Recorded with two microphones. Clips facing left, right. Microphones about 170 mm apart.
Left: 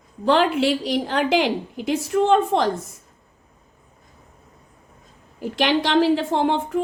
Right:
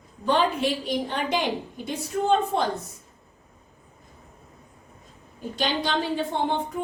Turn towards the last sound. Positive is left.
turn(degrees=85)